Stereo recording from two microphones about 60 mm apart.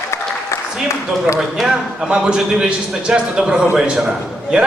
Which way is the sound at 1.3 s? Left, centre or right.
Centre.